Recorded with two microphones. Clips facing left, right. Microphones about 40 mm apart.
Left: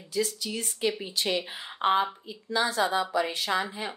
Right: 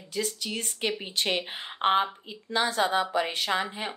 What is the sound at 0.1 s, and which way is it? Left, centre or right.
A woman's voice, right.